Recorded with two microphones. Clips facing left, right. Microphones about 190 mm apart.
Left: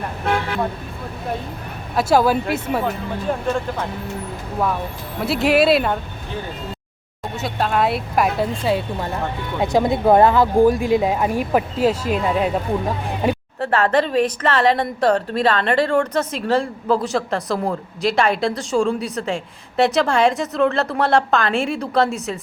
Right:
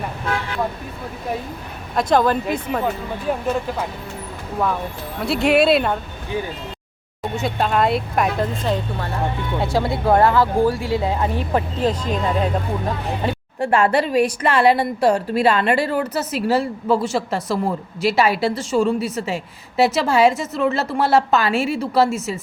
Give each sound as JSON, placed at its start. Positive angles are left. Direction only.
{"t": 2.0, "sound": "speech", "side_deg": 5}
{"t": 3.3, "sound": "speech", "side_deg": -10}
{"t": 5.2, "sound": "speech", "side_deg": 0}
{"t": 7.3, "sound": "speech", "side_deg": 0}
{"t": 9.6, "sound": "speech", "side_deg": 20}
{"t": 13.6, "sound": "speech", "side_deg": -15}